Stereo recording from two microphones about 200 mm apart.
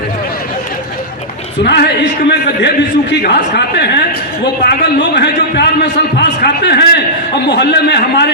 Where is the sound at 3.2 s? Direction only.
55° left (ahead or behind).